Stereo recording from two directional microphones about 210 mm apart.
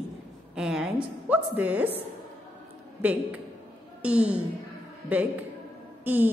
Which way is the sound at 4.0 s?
5° right (ahead or behind).